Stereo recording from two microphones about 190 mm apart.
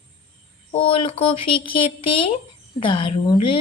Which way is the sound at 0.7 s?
30° left (ahead or behind).